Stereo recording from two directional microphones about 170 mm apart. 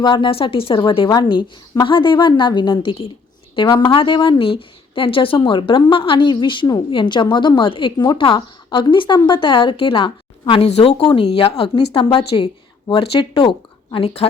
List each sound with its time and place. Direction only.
0.0 s a woman's voice: 30° left (ahead or behind)